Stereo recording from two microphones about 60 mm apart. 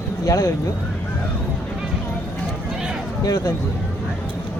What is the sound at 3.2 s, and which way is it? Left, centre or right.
Speech, left.